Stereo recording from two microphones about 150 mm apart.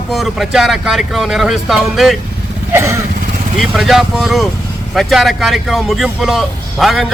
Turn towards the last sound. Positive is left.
turn(degrees=0)  # may be behind; listen again after turning